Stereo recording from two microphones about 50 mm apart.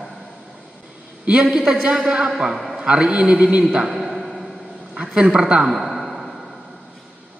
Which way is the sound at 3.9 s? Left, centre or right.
Centre.